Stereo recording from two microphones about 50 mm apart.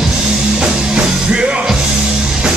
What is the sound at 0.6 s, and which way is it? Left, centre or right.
Music, centre.